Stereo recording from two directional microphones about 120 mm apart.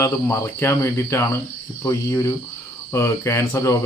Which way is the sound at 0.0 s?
20° left (ahead or behind).